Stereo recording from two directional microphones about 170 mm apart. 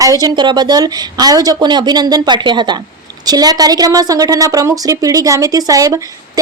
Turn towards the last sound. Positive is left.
turn(degrees=-20)  # may be behind; listen again after turning